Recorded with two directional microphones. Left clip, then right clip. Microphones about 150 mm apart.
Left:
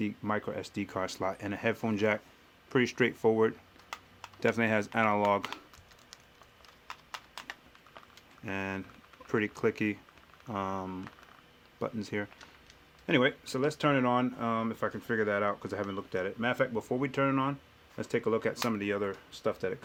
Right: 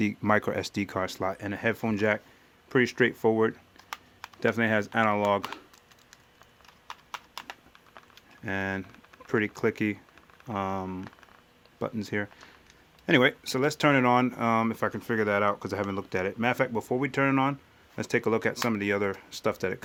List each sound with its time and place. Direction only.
0.0 s speech: 55° right (ahead or behind); by 5.4 s 20° right (ahead or behind)
8.4 s speech: 30° right (ahead or behind)
13.1 s speech: 45° right (ahead or behind); by 19.8 s 60° right (ahead or behind)